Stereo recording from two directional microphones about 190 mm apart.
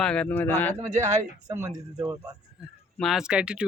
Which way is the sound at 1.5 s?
15° right (ahead or behind).